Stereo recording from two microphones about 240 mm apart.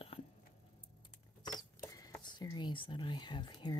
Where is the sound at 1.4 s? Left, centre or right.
Centre.